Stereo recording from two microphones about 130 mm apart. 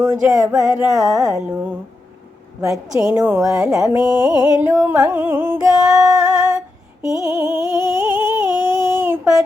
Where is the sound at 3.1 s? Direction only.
15° right (ahead or behind).